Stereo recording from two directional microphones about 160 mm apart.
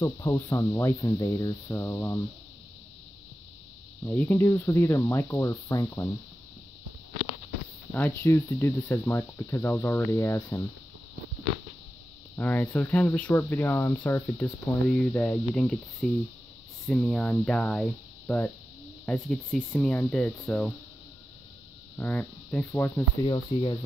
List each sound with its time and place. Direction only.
0.0 s cricket: 20° left (ahead or behind)
4.0 s speech: 10° left (ahead or behind)
7.9 s speech: 15° left (ahead or behind)
12.4 s speech: 10° left (ahead or behind)
21.9 s insect: 10° left (ahead or behind)
23.2 s cricket: 30° left (ahead or behind)